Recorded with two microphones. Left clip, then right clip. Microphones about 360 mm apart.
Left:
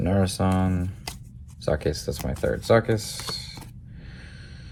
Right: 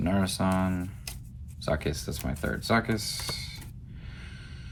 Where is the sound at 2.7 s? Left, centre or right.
Left.